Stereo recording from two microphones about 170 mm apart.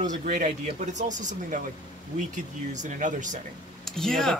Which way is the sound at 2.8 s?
50° right (ahead or behind).